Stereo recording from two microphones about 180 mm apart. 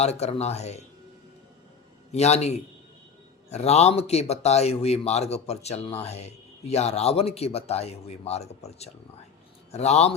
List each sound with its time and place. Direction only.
0.0 s speech: 35° left (ahead or behind)
2.1 s speech: 35° left (ahead or behind)